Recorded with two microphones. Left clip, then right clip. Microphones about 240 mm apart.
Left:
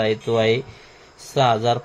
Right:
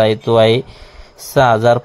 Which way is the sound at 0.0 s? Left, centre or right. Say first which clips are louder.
Right 8 dB; right.